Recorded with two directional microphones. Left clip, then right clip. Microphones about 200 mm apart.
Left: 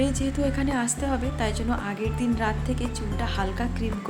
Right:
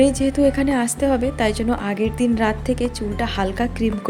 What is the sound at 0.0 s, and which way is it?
A woman's voice, 25° right (ahead or behind).